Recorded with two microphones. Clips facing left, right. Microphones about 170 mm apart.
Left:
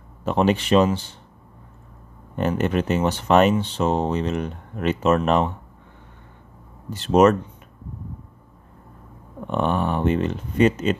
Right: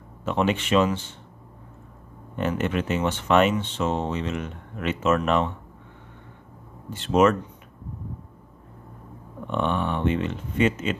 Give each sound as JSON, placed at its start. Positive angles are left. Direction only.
{"t": 0.2, "sound": "speech", "side_deg": 35}
{"t": 2.3, "sound": "speech", "side_deg": 40}
{"t": 6.9, "sound": "speech", "side_deg": 40}
{"t": 9.5, "sound": "speech", "side_deg": 40}